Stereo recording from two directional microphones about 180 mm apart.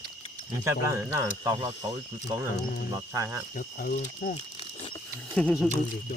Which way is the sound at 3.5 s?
50° left (ahead or behind).